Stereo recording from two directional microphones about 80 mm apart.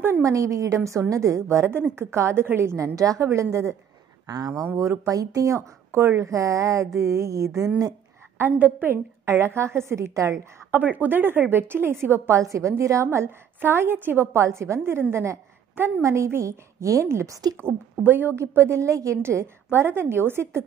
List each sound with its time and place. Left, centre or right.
0.2 s a woman's voice: right
4.3 s speech: right
4.7 s a woman's voice: right
8.4 s a woman's voice: right
9.2 s a woman's voice: right
10.7 s a woman's voice: right